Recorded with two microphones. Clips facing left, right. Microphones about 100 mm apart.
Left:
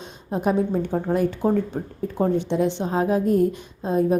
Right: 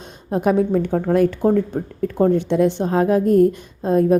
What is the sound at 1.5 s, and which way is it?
Speech, 45° right (ahead or behind).